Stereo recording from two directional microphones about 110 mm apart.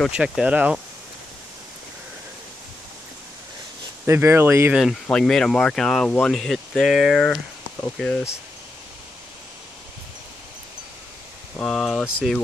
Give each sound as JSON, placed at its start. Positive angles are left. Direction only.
{"t": 0.1, "sound": "speech", "side_deg": -10}
{"t": 4.0, "sound": "speech", "side_deg": -25}
{"t": 5.0, "sound": "speech", "side_deg": 5}
{"t": 11.5, "sound": "speech", "side_deg": 5}